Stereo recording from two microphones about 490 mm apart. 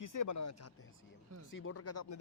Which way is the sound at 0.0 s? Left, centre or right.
Left.